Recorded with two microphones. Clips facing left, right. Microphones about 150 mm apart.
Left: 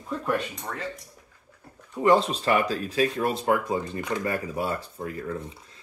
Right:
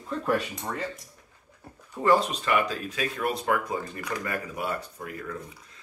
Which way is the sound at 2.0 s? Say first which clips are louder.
Left 2 dB; 25° left (ahead or behind).